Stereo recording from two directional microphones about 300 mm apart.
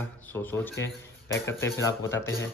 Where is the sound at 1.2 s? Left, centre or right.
Left.